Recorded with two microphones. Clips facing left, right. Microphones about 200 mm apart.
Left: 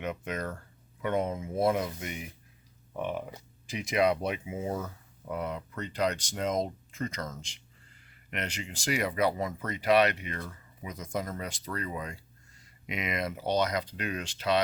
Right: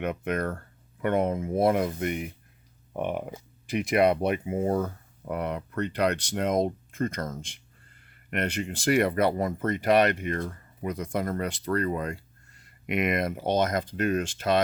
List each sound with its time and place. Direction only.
0.0 s speech: 60° right (ahead or behind)